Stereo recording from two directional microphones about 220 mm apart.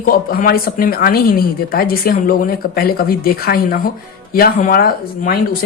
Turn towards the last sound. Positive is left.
turn(degrees=40)  # may be behind; listen again after turning